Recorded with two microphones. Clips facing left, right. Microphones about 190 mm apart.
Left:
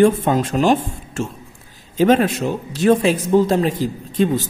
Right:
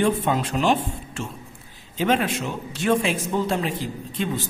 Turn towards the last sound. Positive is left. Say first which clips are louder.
# left 9 dB
turn(degrees=40)  # may be behind; listen again after turning